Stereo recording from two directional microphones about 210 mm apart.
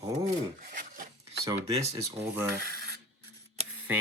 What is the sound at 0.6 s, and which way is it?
Filing, 40° right (ahead or behind).